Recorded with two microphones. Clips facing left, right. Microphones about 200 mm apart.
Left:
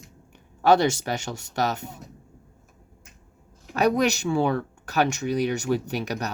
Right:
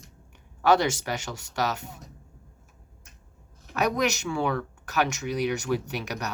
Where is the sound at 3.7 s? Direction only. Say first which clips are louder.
Left 4 dB; 30° left (ahead or behind).